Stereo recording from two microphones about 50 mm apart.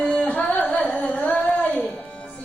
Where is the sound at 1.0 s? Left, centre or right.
Left.